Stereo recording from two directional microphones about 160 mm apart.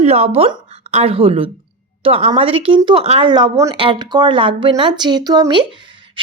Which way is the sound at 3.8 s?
30° right (ahead or behind).